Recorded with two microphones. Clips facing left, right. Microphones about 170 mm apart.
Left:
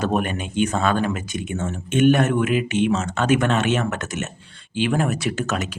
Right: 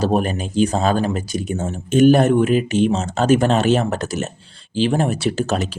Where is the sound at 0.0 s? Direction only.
35° right (ahead or behind).